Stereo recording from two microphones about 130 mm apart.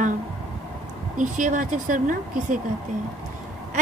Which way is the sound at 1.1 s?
75° right (ahead or behind).